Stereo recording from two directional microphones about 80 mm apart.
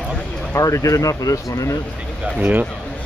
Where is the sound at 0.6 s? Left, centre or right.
Left.